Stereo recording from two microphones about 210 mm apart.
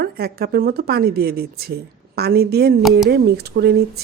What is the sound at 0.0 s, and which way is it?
Speech, 50° right (ahead or behind).